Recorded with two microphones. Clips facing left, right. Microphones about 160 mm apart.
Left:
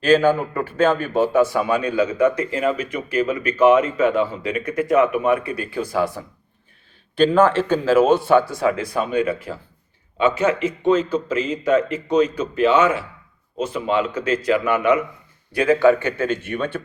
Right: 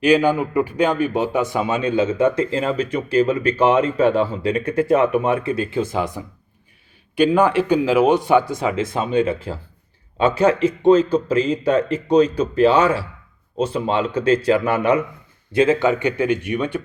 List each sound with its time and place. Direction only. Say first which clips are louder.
0.0 s a man's voice: even; 15° right (ahead or behind)